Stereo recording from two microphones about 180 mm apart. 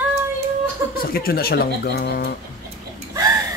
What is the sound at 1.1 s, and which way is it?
Speech, 55° left (ahead or behind).